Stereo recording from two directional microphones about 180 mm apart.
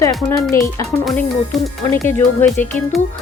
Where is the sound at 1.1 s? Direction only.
Centre (ahead or behind).